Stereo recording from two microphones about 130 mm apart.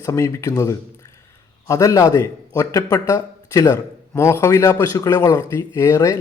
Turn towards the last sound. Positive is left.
turn(degrees=25)  # may be behind; listen again after turning